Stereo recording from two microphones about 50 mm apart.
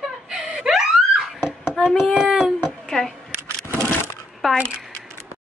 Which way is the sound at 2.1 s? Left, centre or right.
Right.